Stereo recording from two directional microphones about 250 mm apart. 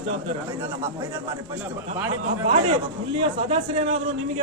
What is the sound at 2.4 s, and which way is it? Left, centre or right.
A man's voice, right.